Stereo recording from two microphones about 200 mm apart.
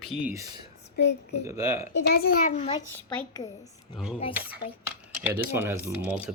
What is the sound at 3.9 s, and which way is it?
Speech, 25° left (ahead or behind).